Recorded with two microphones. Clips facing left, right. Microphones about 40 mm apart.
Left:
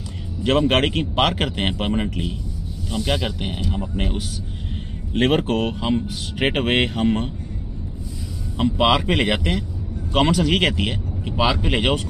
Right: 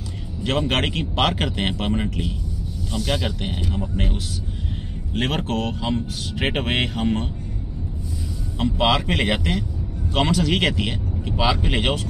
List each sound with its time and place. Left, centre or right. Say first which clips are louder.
0.4 s speech: left 4 dB; centre
8.5 s speech: left 2 dB; centre
11.4 s speech: left 2 dB; centre